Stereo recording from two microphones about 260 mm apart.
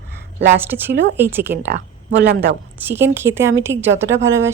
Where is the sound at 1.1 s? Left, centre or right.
Centre.